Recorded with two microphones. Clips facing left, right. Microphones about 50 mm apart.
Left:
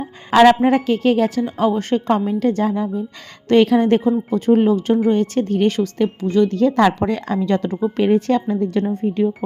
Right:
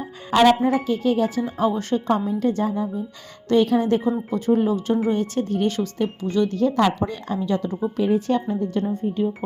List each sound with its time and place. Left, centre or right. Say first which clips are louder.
0.3 s a woman's voice: left 5 dB; left
6.6 s a woman's voice: left 4 dB; left
8.4 s a woman's voice: left 4 dB; left